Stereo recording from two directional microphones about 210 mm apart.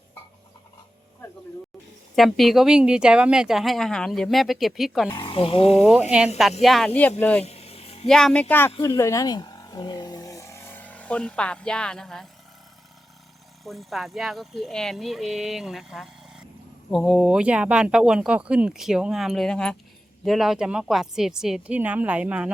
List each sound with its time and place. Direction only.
2.1 s a woman's voice: centre (ahead or behind)
5.0 s speech: 20° left (ahead or behind)
5.8 s a woman's voice: 5° right (ahead or behind)
7.4 s a sound: 30° left (ahead or behind)
8.0 s speech: 5° left (ahead or behind)
13.7 s a woman's voice: centre (ahead or behind)